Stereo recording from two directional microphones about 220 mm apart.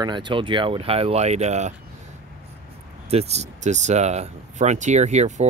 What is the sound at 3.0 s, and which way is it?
Speech, 30° right (ahead or behind).